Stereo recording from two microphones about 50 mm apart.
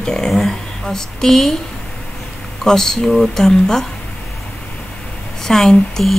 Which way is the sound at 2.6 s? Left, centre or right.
Centre.